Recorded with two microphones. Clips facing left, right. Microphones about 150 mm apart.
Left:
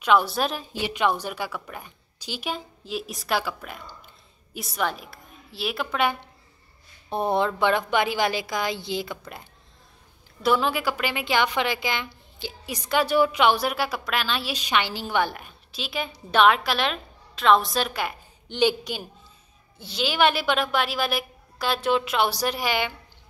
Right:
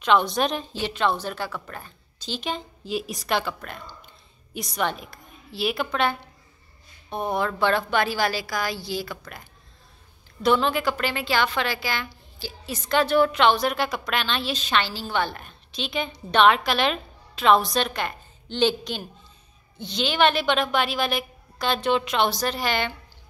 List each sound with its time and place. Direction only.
0.0 s a woman's voice: 5° left (ahead or behind)
7.1 s a woman's voice: 30° left (ahead or behind)
10.4 s a woman's voice: 5° left (ahead or behind)